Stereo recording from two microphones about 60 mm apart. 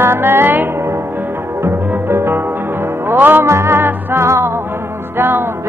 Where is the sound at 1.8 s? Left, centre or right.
Right.